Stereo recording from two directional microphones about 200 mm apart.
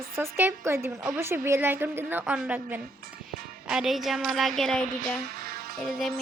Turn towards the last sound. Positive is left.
turn(degrees=0)  # may be behind; listen again after turning